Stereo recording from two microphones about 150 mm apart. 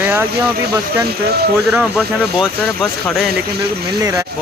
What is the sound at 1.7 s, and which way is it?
Speech, 5° right (ahead or behind).